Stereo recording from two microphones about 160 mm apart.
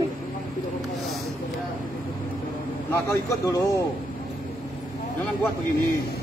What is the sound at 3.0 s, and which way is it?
Speech, 20° left (ahead or behind).